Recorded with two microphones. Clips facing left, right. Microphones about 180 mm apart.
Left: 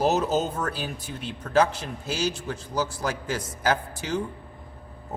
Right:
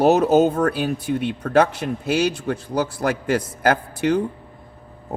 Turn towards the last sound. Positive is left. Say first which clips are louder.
# right 7 dB
turn(degrees=-60)  # may be behind; listen again after turning